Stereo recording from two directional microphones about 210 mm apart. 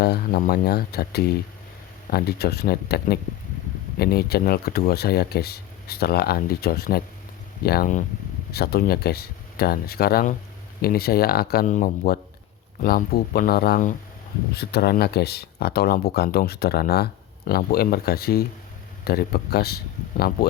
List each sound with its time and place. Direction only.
0.0 s speech: 50° left (ahead or behind)